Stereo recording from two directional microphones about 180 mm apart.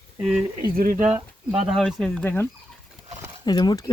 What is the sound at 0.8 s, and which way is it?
Speech, 50° right (ahead or behind).